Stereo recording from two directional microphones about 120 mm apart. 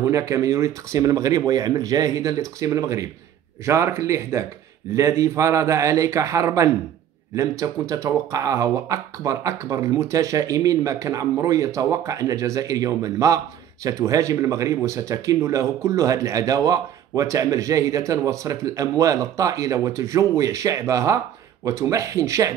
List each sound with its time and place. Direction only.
0.0 s speech: 25° right (ahead or behind)